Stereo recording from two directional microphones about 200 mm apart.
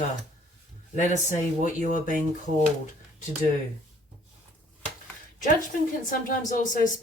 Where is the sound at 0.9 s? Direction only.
35° left (ahead or behind).